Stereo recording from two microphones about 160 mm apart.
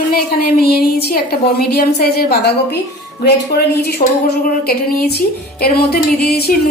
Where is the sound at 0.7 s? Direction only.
75° left (ahead or behind).